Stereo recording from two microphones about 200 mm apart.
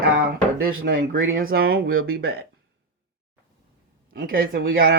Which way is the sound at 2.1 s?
55° right (ahead or behind).